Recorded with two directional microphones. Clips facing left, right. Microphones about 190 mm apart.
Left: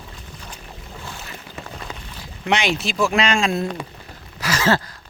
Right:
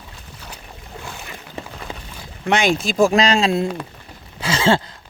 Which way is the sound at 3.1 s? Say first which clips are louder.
Right 3 dB; 35° right (ahead or behind).